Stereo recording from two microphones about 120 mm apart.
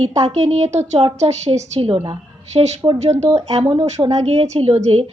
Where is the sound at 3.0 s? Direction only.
70° right (ahead or behind).